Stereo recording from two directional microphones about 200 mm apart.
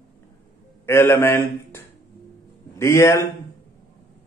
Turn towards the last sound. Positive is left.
turn(degrees=15)  # may be behind; listen again after turning